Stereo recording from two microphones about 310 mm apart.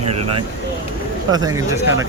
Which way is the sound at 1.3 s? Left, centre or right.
Centre.